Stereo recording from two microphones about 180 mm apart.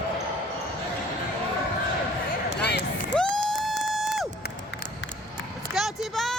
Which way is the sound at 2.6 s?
65° left (ahead or behind).